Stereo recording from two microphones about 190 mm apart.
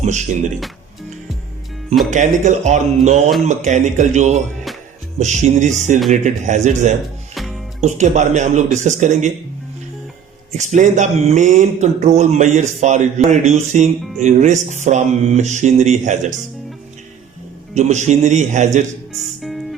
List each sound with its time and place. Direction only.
0.0 s speech: 40° right (ahead or behind)
2.0 s speech: 40° right (ahead or behind)
7.4 s music: centre (ahead or behind)
7.8 s speech: 40° right (ahead or behind)
10.5 s speech: 40° right (ahead or behind)
17.7 s speech: 40° right (ahead or behind)
19.1 s music: centre (ahead or behind)